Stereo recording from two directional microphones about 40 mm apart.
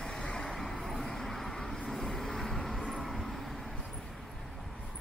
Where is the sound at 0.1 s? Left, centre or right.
Left.